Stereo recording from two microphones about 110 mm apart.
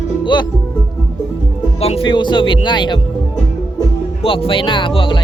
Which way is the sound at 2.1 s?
45° left (ahead or behind).